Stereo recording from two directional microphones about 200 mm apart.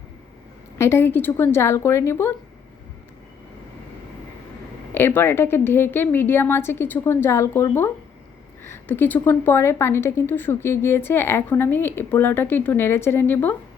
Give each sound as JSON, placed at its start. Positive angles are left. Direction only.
{"t": 0.8, "sound": "a woman's voice", "side_deg": 10}
{"t": 4.9, "sound": "a woman's voice", "side_deg": 10}